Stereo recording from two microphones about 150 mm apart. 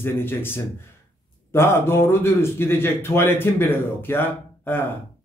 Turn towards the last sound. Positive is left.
turn(degrees=15)  # may be behind; listen again after turning